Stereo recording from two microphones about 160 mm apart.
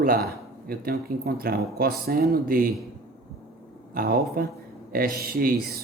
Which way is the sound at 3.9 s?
65° right (ahead or behind).